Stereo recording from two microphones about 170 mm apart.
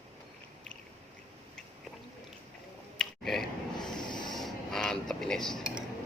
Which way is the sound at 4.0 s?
25° left (ahead or behind).